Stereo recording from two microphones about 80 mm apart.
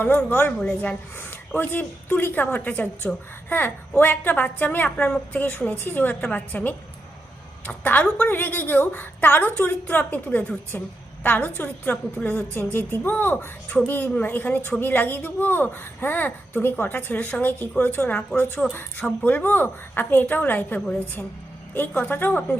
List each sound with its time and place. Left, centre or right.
0.3 s a woman's voice: left